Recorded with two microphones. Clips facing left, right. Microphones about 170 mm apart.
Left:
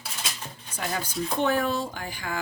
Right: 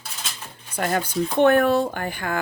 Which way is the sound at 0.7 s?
60° right (ahead or behind).